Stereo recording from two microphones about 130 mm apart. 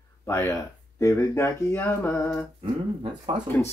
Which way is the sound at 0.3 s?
20° left (ahead or behind).